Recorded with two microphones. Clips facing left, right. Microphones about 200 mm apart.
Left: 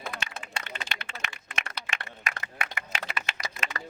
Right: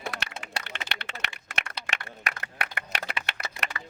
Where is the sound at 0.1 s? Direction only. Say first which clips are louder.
Right 1 dB; 70° right (ahead or behind).